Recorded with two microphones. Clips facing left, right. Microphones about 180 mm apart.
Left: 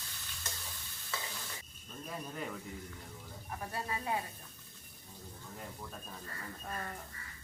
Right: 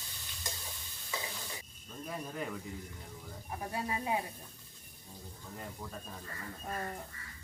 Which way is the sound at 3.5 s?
15° right (ahead or behind).